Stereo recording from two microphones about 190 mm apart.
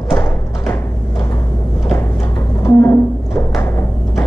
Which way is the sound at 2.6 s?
15° left (ahead or behind).